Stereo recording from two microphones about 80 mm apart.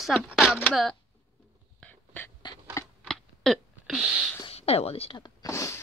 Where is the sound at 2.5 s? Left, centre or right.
Left.